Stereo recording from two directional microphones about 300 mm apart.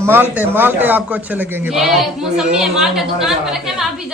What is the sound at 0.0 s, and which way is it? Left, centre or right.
A man's voice, centre.